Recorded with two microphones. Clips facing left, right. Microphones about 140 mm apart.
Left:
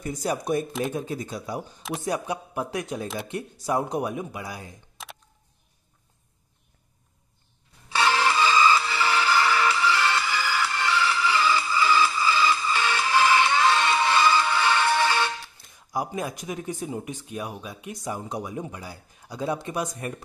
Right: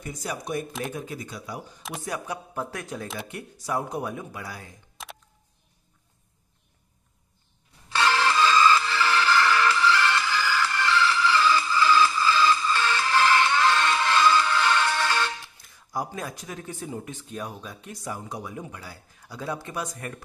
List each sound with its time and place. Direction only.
0.0 s speech: 35° left (ahead or behind)
1.8 s speech: centre (ahead or behind)
2.0 s speech: 20° left (ahead or behind)
5.0 s a sound: centre (ahead or behind)
7.9 s music: 15° left (ahead or behind)
15.7 s speech: 15° left (ahead or behind)